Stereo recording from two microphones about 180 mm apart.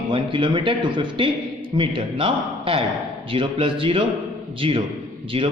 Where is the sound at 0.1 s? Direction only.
30° right (ahead or behind).